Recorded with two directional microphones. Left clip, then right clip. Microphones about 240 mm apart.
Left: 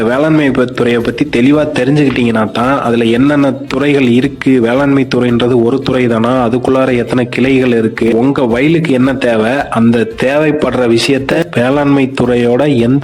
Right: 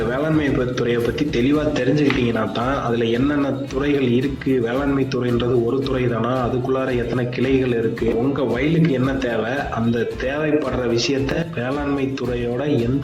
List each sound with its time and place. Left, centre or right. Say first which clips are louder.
0.1 s a man's voice: left 10 dB; left